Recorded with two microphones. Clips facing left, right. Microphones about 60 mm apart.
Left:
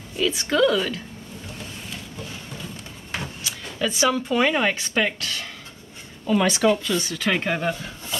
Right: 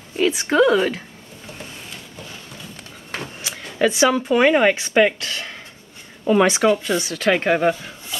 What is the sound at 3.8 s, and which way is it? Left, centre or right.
A woman's voice, right.